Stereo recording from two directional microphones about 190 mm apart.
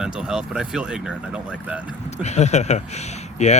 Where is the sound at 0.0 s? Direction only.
5° right (ahead or behind).